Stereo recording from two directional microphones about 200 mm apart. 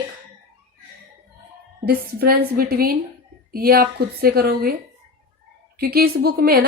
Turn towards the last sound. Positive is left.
turn(degrees=-50)  # may be behind; listen again after turning